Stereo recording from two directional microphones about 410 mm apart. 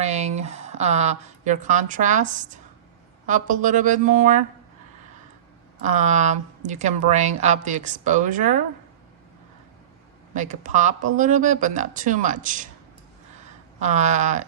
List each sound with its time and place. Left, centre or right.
0.0 s a woman's voice: centre
5.8 s a woman's voice: centre
10.3 s a woman's voice: centre
13.7 s a woman's voice: centre